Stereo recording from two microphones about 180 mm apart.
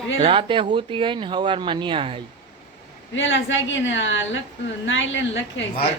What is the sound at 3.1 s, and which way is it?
A woman's voice, 90° left.